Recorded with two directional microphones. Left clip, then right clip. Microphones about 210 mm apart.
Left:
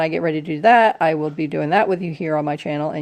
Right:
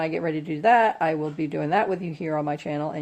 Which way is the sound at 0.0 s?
40° left (ahead or behind).